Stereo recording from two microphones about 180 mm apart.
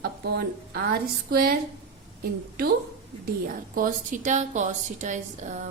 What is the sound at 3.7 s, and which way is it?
A woman's voice, 50° right (ahead or behind).